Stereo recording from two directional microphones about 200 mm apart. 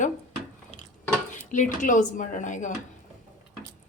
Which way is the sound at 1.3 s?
40° left (ahead or behind).